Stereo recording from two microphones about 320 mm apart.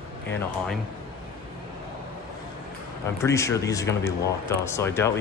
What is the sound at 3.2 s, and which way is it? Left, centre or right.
Speech, centre.